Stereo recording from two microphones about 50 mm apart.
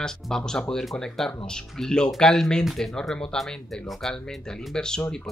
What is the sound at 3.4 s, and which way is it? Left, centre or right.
Speech, centre.